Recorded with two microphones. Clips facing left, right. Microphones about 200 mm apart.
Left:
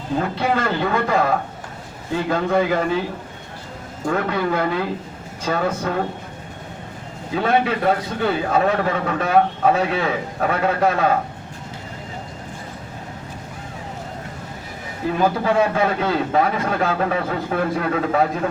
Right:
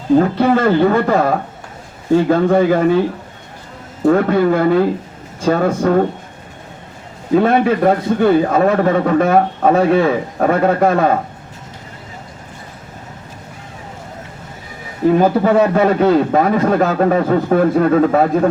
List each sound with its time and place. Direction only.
0.2 s a man's voice: 45° right (ahead or behind)
4.0 s a man's voice: 45° right (ahead or behind)
7.3 s a man's voice: 45° right (ahead or behind)
15.0 s a man's voice: 40° right (ahead or behind)